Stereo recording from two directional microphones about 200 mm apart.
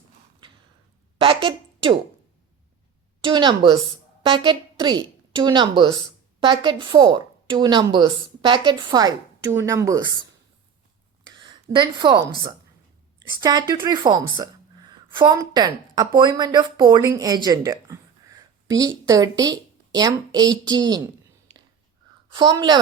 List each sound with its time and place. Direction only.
1.2 s a sound: 30° right (ahead or behind)
3.2 s a woman's voice: 25° right (ahead or behind)
11.4 s a woman's voice: 20° right (ahead or behind)
13.4 s a woman's voice: 20° right (ahead or behind)
22.3 s a woman's voice: 20° right (ahead or behind)